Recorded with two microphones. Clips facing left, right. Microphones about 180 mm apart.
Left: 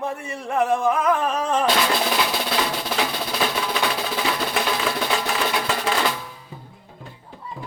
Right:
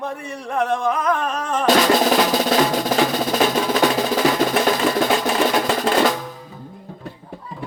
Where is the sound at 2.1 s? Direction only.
45° right (ahead or behind).